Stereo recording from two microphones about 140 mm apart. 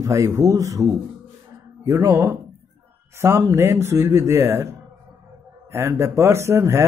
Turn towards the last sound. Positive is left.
turn(degrees=-20)  # may be behind; listen again after turning